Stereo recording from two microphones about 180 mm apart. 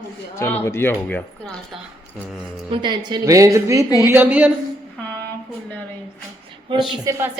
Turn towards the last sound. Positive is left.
turn(degrees=-15)  # may be behind; listen again after turning